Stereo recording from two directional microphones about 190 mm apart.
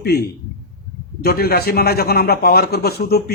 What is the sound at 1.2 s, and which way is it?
Speech, 55° left (ahead or behind).